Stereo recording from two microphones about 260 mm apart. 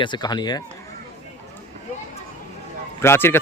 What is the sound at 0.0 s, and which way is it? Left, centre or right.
Speech, centre.